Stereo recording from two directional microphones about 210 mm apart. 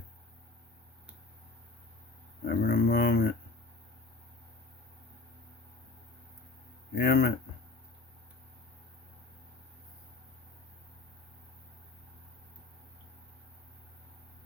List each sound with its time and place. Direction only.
2.5 s speech: 45° left (ahead or behind)
6.9 s speech: 45° left (ahead or behind)